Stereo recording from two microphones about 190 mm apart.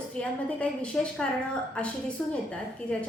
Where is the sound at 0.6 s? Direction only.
5° left (ahead or behind).